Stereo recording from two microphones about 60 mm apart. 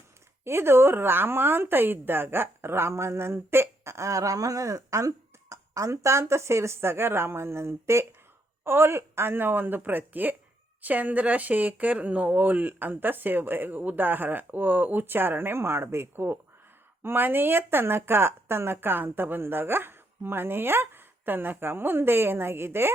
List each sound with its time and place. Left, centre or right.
0.4 s a woman's voice: right